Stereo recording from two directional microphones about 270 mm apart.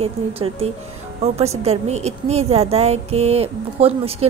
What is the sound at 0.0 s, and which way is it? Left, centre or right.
A woman's voice, right.